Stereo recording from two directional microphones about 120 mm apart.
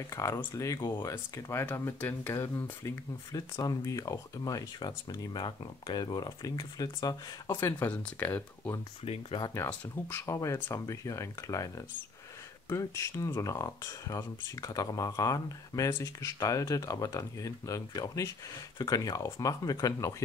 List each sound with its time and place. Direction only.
0.1 s speech: 25° left (ahead or behind)
0.7 s speech: 40° left (ahead or behind)
1.0 s speech: 25° left (ahead or behind)
9.0 s speech: 55° left (ahead or behind)
9.7 s speech: 20° left (ahead or behind)